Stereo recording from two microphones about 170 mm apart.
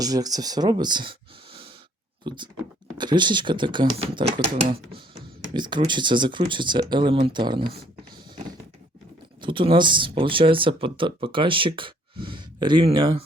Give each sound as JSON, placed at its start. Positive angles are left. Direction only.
{"t": 0.0, "sound": "speech", "side_deg": -20}
{"t": 2.2, "sound": "speech", "side_deg": -25}
{"t": 5.5, "sound": "speech", "side_deg": -25}
{"t": 9.4, "sound": "speech", "side_deg": -30}